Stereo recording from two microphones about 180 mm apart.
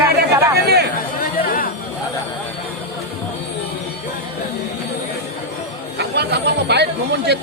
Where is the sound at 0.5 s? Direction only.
60° right (ahead or behind).